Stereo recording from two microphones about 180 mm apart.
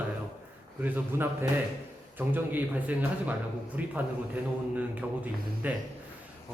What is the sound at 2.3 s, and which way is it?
A man's voice, 10° right (ahead or behind).